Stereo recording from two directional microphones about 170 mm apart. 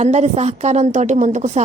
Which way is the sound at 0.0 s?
40° right (ahead or behind).